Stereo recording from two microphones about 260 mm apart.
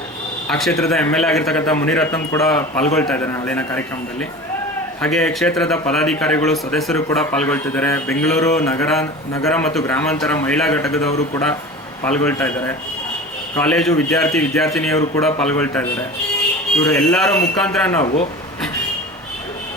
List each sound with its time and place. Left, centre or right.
0.4 s a man's voice: centre
5.0 s a man's voice: centre
12.0 s a man's voice: centre
18.0 s speech: left